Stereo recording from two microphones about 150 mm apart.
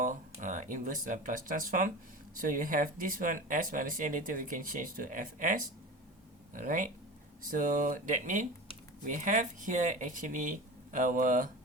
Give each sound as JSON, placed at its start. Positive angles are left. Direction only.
{"t": 0.0, "sound": "speech", "side_deg": -60}